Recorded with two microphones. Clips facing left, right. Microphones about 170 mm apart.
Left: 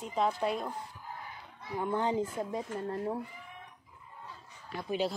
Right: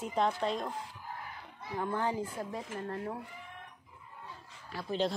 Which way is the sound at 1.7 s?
20° left (ahead or behind).